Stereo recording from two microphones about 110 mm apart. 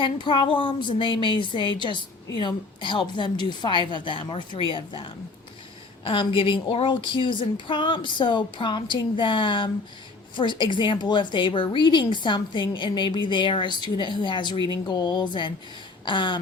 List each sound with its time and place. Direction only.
0.0 s a woman's voice: 45° left (ahead or behind)